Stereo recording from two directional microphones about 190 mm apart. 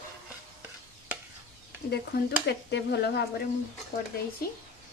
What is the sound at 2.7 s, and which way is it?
Speech, 60° left (ahead or behind).